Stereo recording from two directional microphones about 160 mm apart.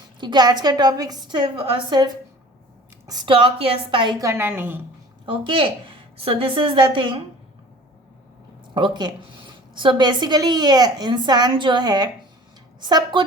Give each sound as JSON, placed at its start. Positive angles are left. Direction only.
{"t": 0.2, "sound": "a woman's voice", "side_deg": -25}
{"t": 3.1, "sound": "a woman's voice", "side_deg": -30}
{"t": 5.2, "sound": "a woman's voice", "side_deg": -35}
{"t": 8.7, "sound": "a woman's voice", "side_deg": -30}